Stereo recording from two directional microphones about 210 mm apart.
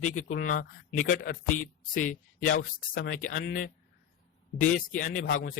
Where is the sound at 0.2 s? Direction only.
40° left (ahead or behind).